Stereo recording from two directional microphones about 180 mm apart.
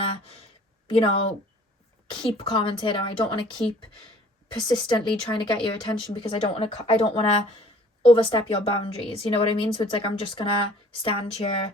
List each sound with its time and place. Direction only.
0.9 s a woman's voice: 30° left (ahead or behind)